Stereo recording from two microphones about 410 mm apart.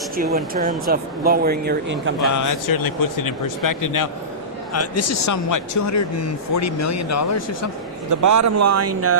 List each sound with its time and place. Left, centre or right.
0.2 s speech: right
2.3 s speech: left
4.7 s speech: left
8.1 s speech: right